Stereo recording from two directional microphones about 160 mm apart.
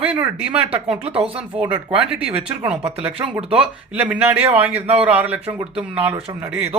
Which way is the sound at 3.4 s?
5° right (ahead or behind).